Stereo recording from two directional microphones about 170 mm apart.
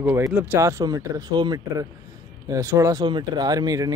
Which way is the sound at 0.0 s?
15° right (ahead or behind).